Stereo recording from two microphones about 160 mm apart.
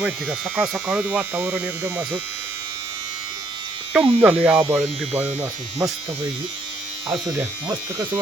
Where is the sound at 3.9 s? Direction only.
5° right (ahead or behind).